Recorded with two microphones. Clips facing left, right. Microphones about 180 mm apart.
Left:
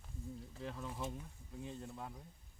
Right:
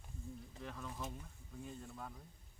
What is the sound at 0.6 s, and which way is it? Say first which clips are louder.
Speech: left 3 dB; 30° left (ahead or behind).